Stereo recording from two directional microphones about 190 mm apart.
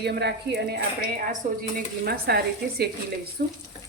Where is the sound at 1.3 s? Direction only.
50° right (ahead or behind).